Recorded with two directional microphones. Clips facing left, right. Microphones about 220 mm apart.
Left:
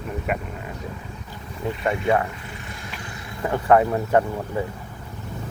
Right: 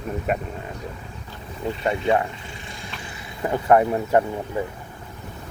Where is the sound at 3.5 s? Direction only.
15° right (ahead or behind).